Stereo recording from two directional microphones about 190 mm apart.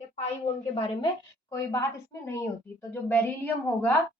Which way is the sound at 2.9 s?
10° left (ahead or behind).